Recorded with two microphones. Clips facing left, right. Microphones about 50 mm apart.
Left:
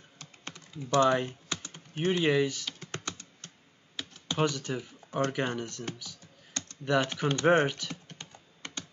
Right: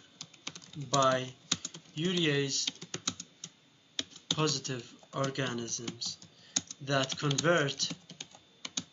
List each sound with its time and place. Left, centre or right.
0.2 s typing: left
4.0 s computer keyboard: centre
4.4 s speech: centre
7.9 s typing: left